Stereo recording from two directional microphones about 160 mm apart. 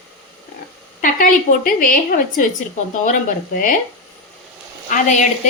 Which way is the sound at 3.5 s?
55° left (ahead or behind).